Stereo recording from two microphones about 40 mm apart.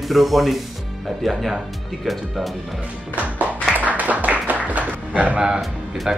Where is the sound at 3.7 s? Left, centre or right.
Right.